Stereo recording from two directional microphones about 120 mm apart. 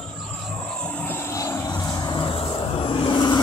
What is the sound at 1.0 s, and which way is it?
Vehicle, 20° left (ahead or behind).